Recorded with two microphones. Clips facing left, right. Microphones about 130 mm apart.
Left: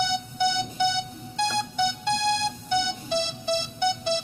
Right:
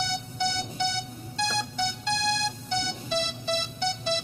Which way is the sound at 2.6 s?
15° left (ahead or behind).